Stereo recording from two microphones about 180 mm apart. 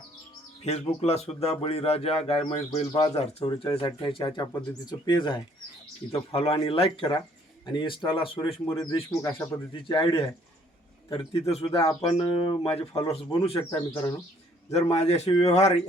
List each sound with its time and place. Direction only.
0.6 s speech: 35° left (ahead or behind)
13.6 s speech: 20° left (ahead or behind)
14.7 s speech: 35° left (ahead or behind)